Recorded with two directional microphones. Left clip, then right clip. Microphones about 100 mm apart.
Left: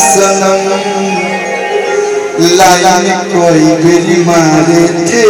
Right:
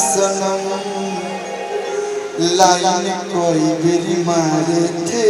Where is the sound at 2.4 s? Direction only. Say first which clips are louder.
Left 7 dB; 20° right (ahead or behind).